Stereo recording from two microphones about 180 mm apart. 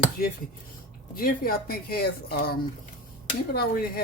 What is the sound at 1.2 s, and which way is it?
Speech, 55° left (ahead or behind).